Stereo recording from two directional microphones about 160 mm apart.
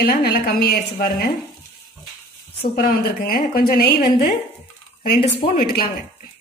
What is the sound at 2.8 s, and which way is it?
Speech, 65° left (ahead or behind).